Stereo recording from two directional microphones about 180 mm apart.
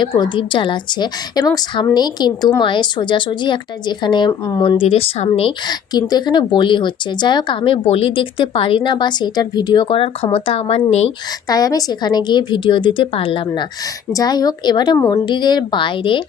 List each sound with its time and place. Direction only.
0.0 s a woman's voice: 25° left (ahead or behind)
11.4 s a woman's voice: 20° left (ahead or behind)